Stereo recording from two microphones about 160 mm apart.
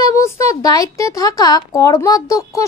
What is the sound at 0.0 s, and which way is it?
Speech, 20° left (ahead or behind).